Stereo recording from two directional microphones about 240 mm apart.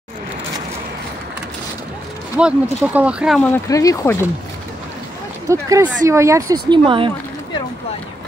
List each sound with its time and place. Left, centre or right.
2.3 s speech: centre
5.5 s speech: centre